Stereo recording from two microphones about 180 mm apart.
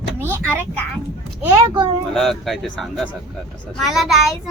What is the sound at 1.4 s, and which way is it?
Speech, 20° right (ahead or behind).